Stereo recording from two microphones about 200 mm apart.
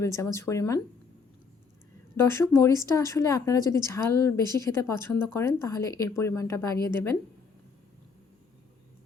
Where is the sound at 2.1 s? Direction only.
15° left (ahead or behind).